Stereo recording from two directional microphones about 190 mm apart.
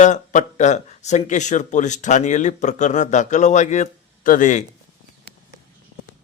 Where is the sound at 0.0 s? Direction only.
40° left (ahead or behind).